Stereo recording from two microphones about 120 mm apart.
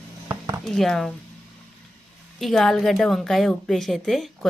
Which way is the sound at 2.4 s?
Centre (ahead or behind).